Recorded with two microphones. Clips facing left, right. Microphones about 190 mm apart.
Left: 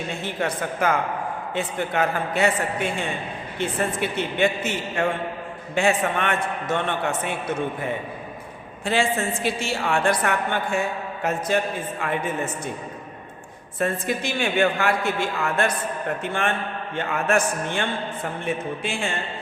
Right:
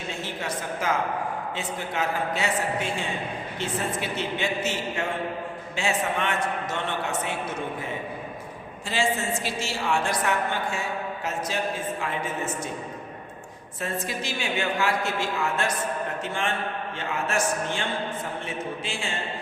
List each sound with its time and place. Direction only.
0.1 s a woman's voice: 55° left (ahead or behind)
8.8 s a woman's voice: 55° left (ahead or behind)
13.7 s a woman's voice: 55° left (ahead or behind)